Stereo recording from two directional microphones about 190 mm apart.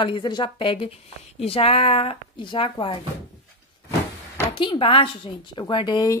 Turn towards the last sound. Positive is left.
turn(degrees=25)  # may be behind; listen again after turning